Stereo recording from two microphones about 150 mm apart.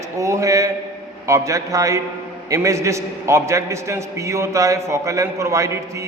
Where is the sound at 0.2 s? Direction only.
20° right (ahead or behind).